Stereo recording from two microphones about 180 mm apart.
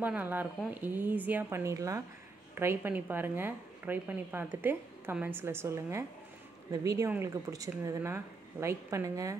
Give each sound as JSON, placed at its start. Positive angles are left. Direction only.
{"t": 0.0, "sound": "speech", "side_deg": -10}